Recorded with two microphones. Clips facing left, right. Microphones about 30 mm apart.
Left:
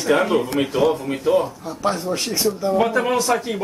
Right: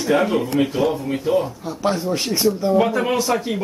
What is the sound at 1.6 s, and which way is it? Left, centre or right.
Speech, centre.